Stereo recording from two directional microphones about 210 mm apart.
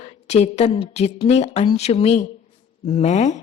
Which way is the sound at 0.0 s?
30° left (ahead or behind).